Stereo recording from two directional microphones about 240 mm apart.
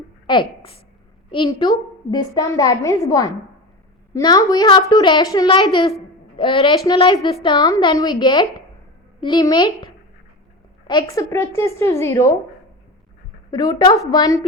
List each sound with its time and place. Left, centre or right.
0.3 s a woman's voice: left
11.1 s a woman's voice: centre
13.5 s a woman's voice: centre